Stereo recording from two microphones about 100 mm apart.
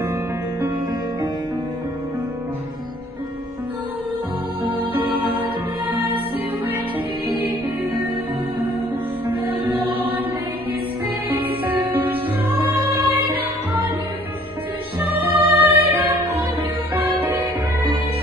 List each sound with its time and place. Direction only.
7.2 s music: 20° right (ahead or behind)
11.2 s music: 20° right (ahead or behind)
15.0 s music: 20° right (ahead or behind)
17.0 s music: 20° right (ahead or behind)